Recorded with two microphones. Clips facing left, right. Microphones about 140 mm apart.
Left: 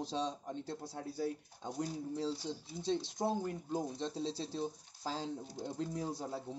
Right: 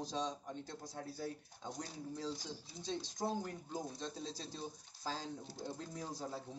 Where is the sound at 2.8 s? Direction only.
25° left (ahead or behind).